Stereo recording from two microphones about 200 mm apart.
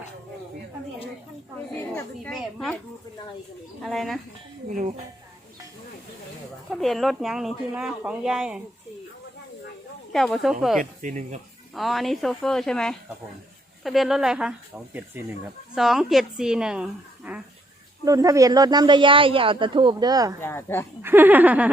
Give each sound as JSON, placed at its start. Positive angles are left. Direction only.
{"t": 2.0, "sound": "speech", "side_deg": 5}
{"t": 3.8, "sound": "speech", "side_deg": 0}
{"t": 6.7, "sound": "speech", "side_deg": 0}
{"t": 10.1, "sound": "speech", "side_deg": 0}
{"t": 10.8, "sound": "speech", "side_deg": -40}
{"t": 11.7, "sound": "speech", "side_deg": 0}
{"t": 15.7, "sound": "speech", "side_deg": 0}
{"t": 18.0, "sound": "speech", "side_deg": -15}
{"t": 20.4, "sound": "speech", "side_deg": 10}
{"t": 21.0, "sound": "speech", "side_deg": -10}